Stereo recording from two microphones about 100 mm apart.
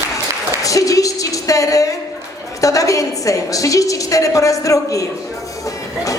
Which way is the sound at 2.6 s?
35° left (ahead or behind).